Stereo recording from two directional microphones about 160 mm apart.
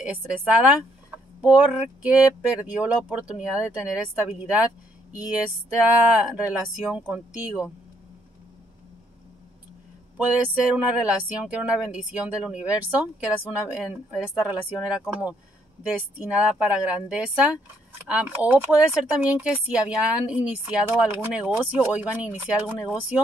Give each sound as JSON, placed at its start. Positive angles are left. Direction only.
{"t": 0.5, "sound": "speech", "side_deg": -10}
{"t": 4.6, "sound": "speech", "side_deg": 20}
{"t": 5.7, "sound": "speech", "side_deg": -10}
{"t": 10.1, "sound": "speech", "side_deg": -10}